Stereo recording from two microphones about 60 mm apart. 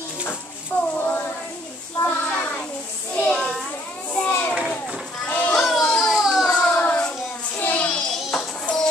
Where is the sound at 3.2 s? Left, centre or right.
Left.